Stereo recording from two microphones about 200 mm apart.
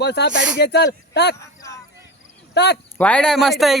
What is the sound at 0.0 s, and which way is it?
Speech, 60° left (ahead or behind).